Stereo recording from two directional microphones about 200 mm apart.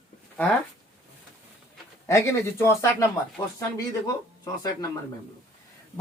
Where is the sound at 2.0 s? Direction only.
15° left (ahead or behind).